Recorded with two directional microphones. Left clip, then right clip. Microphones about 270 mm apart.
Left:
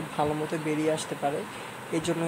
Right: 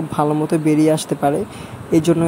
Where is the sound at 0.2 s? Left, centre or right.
Right.